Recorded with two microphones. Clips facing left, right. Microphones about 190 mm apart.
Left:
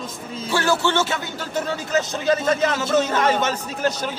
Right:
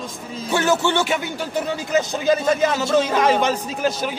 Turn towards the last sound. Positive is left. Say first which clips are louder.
# right 1 dB
turn(degrees=-10)  # may be behind; listen again after turning